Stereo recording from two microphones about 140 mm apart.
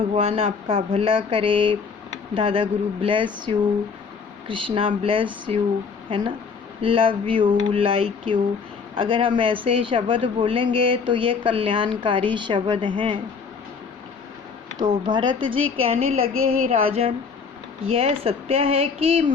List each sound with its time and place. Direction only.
0.0 s speech: 45° right (ahead or behind)
14.8 s speech: 30° right (ahead or behind)
17.9 s speech: 40° right (ahead or behind)